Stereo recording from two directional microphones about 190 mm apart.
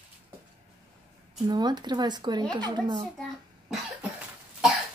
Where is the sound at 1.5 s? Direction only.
20° right (ahead or behind).